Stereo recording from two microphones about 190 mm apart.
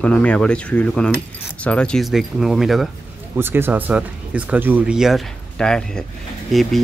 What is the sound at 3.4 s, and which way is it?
Speech, 10° right (ahead or behind).